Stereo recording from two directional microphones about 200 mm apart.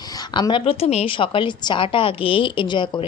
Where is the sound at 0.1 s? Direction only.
20° left (ahead or behind).